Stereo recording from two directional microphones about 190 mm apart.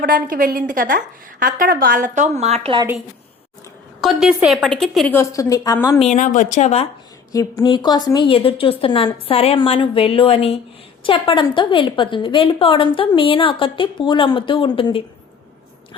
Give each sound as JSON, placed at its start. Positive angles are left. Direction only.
{"t": 0.0, "sound": "a woman's voice", "side_deg": -45}
{"t": 4.0, "sound": "a woman's voice", "side_deg": 0}
{"t": 5.1, "sound": "a woman's voice", "side_deg": 15}
{"t": 6.0, "sound": "a woman's voice", "side_deg": 40}
{"t": 7.3, "sound": "a woman's voice", "side_deg": 20}